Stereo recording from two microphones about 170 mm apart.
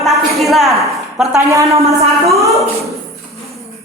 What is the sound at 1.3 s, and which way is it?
Speech, 15° right (ahead or behind).